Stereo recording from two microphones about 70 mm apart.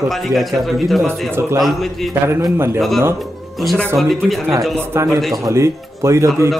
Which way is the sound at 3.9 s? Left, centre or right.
Centre.